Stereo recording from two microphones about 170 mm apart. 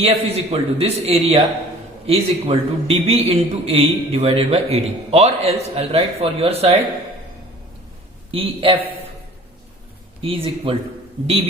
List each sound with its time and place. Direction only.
0.0 s a man's voice: 35° right (ahead or behind)
8.3 s a man's voice: 35° right (ahead or behind)
10.2 s a man's voice: 35° right (ahead or behind)